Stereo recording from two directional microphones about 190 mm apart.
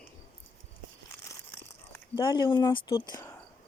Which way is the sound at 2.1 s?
25° left (ahead or behind).